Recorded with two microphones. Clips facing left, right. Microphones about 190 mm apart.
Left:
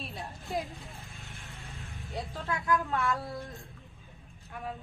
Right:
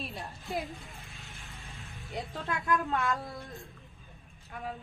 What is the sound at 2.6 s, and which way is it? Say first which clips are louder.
Speech: even; 20° right (ahead or behind).